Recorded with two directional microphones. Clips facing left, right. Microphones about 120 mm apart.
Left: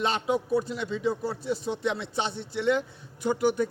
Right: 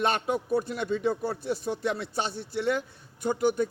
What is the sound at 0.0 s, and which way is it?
A man's voice, 55° right (ahead or behind).